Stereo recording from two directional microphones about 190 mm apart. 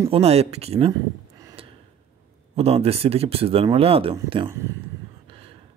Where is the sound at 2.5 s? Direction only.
30° right (ahead or behind).